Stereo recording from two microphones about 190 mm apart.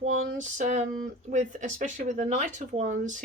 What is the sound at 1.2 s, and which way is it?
Speech, 40° right (ahead or behind).